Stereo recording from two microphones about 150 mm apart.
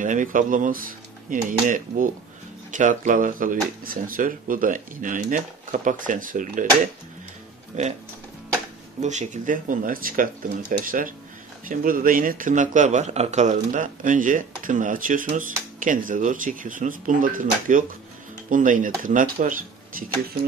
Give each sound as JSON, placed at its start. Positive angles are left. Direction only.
{"t": 0.0, "sound": "speech", "side_deg": -60}
{"t": 9.0, "sound": "speech", "side_deg": -55}